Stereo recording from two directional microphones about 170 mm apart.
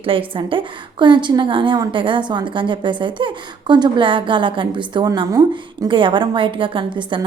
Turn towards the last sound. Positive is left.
turn(degrees=-30)  # may be behind; listen again after turning